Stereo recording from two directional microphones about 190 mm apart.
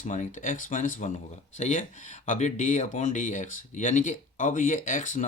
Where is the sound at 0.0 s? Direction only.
40° left (ahead or behind).